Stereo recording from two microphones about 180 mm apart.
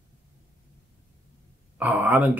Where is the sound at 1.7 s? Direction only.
10° right (ahead or behind).